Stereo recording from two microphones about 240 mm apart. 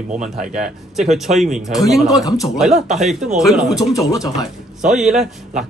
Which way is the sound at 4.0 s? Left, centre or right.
Centre.